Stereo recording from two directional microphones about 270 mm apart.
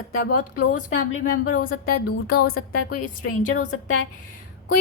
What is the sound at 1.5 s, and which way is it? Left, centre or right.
A woman's voice, left.